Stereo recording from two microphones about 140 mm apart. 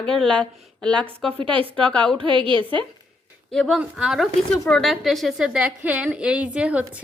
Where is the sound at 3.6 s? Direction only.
5° left (ahead or behind).